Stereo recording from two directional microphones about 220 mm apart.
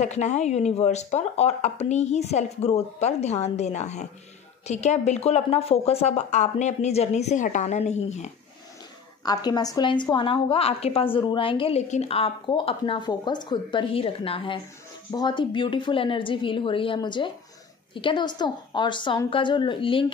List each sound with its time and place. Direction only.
0.0 s speech: 30° left (ahead or behind)
9.2 s a woman's voice: 20° left (ahead or behind)